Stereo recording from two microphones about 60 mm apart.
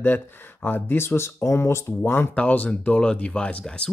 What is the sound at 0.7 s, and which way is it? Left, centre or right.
Speech, left.